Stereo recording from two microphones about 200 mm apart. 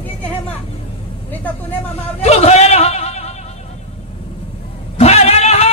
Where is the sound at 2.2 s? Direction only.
30° left (ahead or behind).